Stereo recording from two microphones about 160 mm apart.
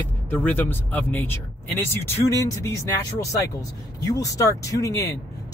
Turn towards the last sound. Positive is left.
turn(degrees=20)  # may be behind; listen again after turning